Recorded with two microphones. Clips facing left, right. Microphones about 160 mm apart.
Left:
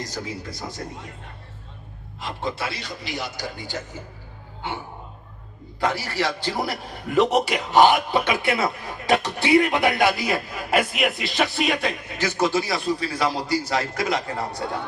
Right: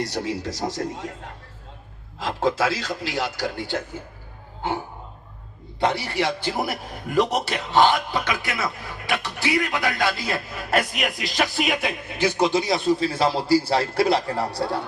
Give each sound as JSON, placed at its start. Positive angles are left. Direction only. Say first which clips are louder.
{"t": 0.0, "sound": "a man's voice", "louder": "right 5 dB", "side_deg": -70}
{"t": 5.8, "sound": "a man's voice", "louder": "right 2 dB", "side_deg": -25}
{"t": 7.1, "sound": "a man's voice", "louder": "left 2 dB", "side_deg": 5}
{"t": 12.2, "sound": "a man's voice", "louder": "right 2 dB", "side_deg": -15}